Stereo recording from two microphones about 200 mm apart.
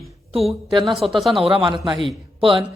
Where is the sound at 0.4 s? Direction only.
Centre (ahead or behind).